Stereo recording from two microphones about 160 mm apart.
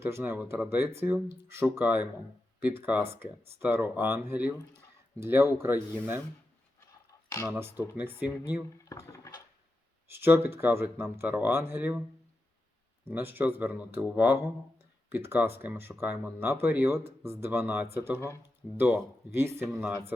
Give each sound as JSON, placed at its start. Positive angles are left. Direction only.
{"t": 0.0, "sound": "speech", "side_deg": -15}
{"t": 7.3, "sound": "speech", "side_deg": 20}
{"t": 7.5, "sound": "speech", "side_deg": -15}
{"t": 8.8, "sound": "dishes", "side_deg": 20}
{"t": 10.1, "sound": "speech", "side_deg": -15}
{"t": 13.1, "sound": "speech", "side_deg": -15}